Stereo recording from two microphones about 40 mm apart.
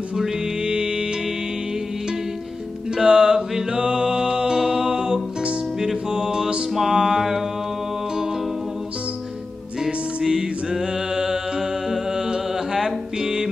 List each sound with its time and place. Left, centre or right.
0.1 s music: centre
3.0 s music: centre
10.2 s mantra: centre